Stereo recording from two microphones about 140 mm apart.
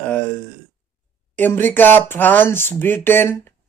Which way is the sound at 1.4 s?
15° left (ahead or behind).